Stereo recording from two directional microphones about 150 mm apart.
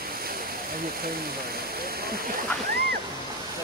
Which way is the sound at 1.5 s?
90° right.